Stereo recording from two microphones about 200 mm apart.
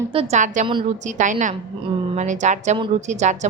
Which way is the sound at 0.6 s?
40° right (ahead or behind).